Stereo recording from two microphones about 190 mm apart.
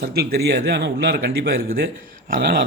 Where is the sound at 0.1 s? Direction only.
55° right (ahead or behind).